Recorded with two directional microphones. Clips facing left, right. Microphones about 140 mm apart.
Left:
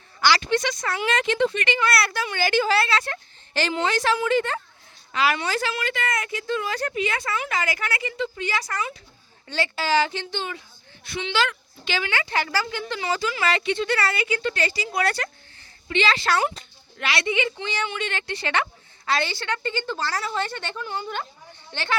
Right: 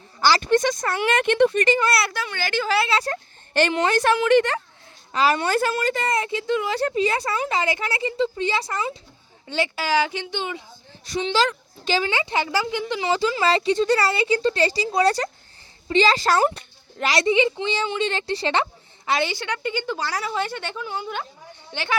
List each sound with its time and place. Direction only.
0.2 s speech: 40° right (ahead or behind); by 1.5 s 60° right (ahead or behind)
1.5 s speech: 40° right (ahead or behind)
2.2 s a woman's voice: 10° left (ahead or behind)
2.9 s speech: 35° right (ahead or behind)
3.5 s a woman's voice: 60° right (ahead or behind); by 4.6 s 75° right (ahead or behind)
5.1 s speech: 35° right (ahead or behind)
5.4 s speech: 50° right (ahead or behind); by 9.0 s 25° right (ahead or behind)
9.5 s speech: 15° right (ahead or behind)
11.0 s a woman's voice: 40° right (ahead or behind)
12.1 s speech: 20° right (ahead or behind)